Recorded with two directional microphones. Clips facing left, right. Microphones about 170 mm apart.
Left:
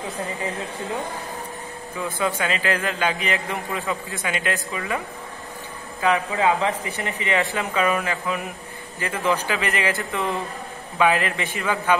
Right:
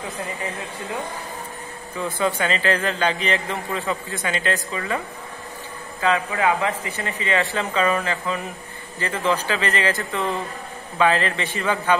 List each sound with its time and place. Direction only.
2.1 s speech: centre (ahead or behind)